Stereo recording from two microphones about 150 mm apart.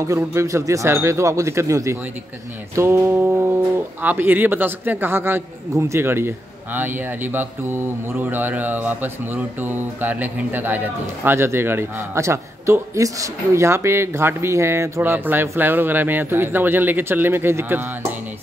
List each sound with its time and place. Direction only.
0.0 s speech: 20° right (ahead or behind)